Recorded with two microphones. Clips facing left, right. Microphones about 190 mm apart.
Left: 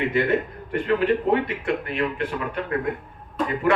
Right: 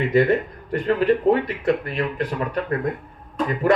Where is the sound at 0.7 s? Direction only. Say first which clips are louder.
Right 2 dB; 35° right (ahead or behind).